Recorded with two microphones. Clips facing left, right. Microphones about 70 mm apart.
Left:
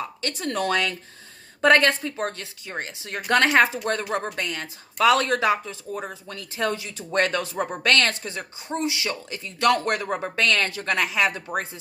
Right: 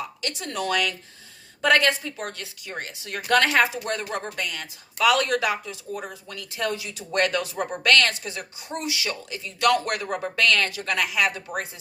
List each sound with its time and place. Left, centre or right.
0.2 s speech: left